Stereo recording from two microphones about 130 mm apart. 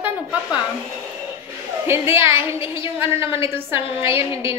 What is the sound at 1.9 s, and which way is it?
Speech, 20° right (ahead or behind).